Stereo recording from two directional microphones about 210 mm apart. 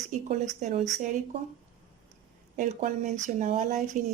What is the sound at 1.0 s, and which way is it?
Speech, 35° right (ahead or behind).